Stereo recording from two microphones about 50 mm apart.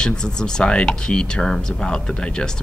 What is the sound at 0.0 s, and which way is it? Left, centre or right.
Speech, centre.